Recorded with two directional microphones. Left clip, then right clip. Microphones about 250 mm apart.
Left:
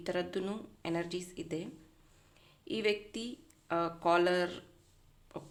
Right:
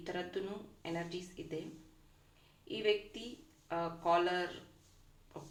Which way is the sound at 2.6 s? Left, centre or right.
Left.